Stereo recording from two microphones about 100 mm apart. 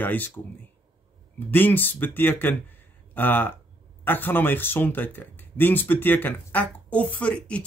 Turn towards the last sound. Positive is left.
turn(degrees=10)  # may be behind; listen again after turning